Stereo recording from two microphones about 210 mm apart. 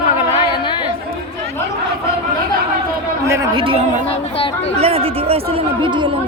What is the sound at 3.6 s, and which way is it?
Speech, 25° right (ahead or behind).